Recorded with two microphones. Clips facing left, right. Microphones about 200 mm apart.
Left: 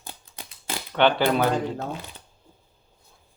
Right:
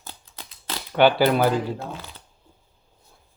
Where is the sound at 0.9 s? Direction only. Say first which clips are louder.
Right 3 dB; 5° right (ahead or behind).